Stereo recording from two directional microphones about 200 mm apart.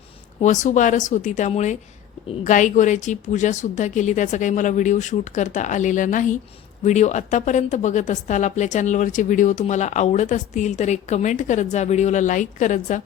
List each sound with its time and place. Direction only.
0.3 s a woman's voice: 35° left (ahead or behind)